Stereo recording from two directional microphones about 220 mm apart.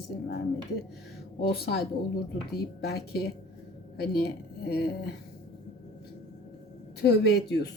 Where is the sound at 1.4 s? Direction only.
45° left (ahead or behind).